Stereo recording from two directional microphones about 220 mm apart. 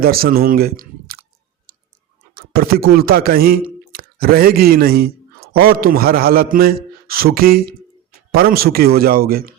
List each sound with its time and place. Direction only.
0.0 s speech: 45° right (ahead or behind)
2.3 s speech: 45° right (ahead or behind)